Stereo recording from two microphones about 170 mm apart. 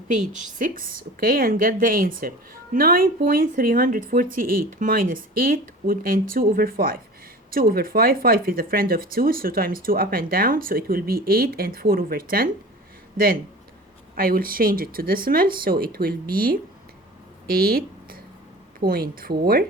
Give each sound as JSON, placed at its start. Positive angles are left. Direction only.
{"t": 0.1, "sound": "speech", "side_deg": -45}
{"t": 17.4, "sound": "a sound", "side_deg": -60}
{"t": 18.8, "sound": "speech", "side_deg": -60}